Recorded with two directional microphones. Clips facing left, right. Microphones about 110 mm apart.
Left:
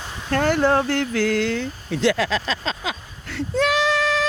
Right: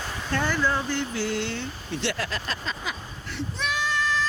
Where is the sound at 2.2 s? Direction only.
90° left.